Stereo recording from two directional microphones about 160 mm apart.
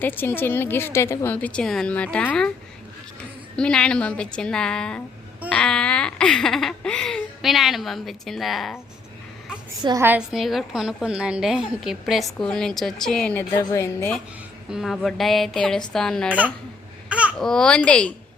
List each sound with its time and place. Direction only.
0.0 s a woman's voice: 10° left (ahead or behind)
10.0 s a woman's voice: 10° right (ahead or behind)
10.3 s a woman's voice: centre (ahead or behind)
13.6 s a woman's voice: 20° left (ahead or behind)
14.7 s a woman's voice: centre (ahead or behind)
17.1 s babbling: 10° right (ahead or behind)
17.3 s a woman's voice: 5° left (ahead or behind)